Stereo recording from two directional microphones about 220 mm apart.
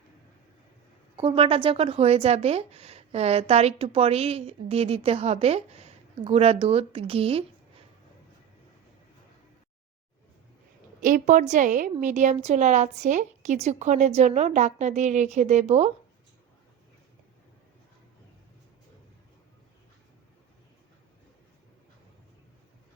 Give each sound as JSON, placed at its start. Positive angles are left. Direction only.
{"t": 1.1, "sound": "speech", "side_deg": -25}
{"t": 11.0, "sound": "a woman's voice", "side_deg": -35}